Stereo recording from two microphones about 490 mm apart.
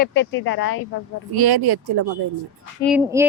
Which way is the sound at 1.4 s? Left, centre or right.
Right.